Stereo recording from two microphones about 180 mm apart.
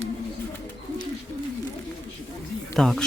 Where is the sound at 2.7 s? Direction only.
Centre (ahead or behind).